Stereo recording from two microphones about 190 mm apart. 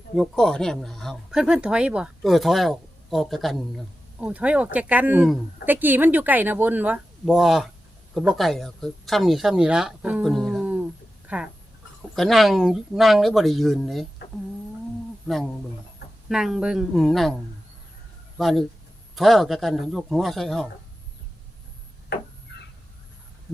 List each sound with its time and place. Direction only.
0.2 s speech: 5° left (ahead or behind)
16.3 s speech: 5° right (ahead or behind)
18.3 s speech: centre (ahead or behind)
22.5 s a sound: 65° left (ahead or behind)